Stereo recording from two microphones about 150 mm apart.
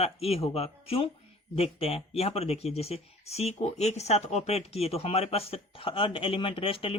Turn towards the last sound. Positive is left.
turn(degrees=35)  # may be behind; listen again after turning